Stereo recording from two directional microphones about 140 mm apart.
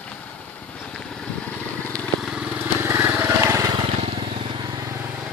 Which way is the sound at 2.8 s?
15° right (ahead or behind).